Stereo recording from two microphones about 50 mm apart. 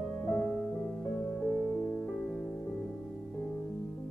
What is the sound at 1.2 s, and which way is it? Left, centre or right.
Music, left.